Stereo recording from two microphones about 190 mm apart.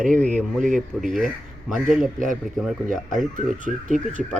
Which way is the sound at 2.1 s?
45° right (ahead or behind).